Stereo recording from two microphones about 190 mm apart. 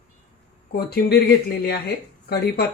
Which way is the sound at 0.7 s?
55° left (ahead or behind).